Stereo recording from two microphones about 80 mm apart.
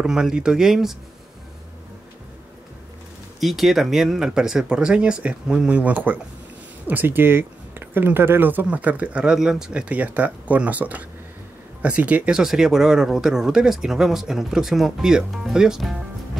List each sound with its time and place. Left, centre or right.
0.0 s speech: centre
3.3 s speech: centre
12.4 s speech: centre